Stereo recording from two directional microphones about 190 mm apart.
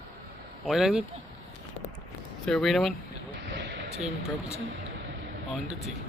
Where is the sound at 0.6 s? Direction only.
Centre (ahead or behind).